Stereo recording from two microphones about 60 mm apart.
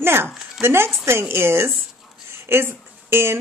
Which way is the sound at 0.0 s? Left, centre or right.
Right.